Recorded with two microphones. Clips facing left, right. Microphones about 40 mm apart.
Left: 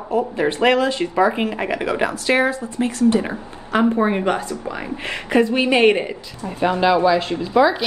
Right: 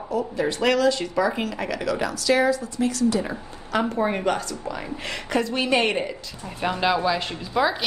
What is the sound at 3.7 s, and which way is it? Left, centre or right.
A woman's voice, left.